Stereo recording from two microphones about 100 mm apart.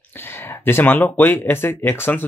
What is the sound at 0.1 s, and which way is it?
A man's voice, 20° left (ahead or behind).